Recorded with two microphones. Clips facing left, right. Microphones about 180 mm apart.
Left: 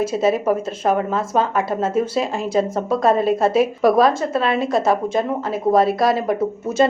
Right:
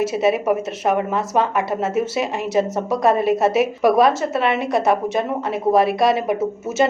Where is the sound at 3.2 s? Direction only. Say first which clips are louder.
Even; centre (ahead or behind).